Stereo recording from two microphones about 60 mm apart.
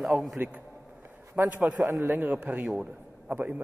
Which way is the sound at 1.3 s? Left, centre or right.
Right.